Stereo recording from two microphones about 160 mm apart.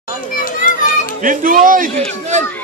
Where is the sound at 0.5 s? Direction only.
60° left (ahead or behind).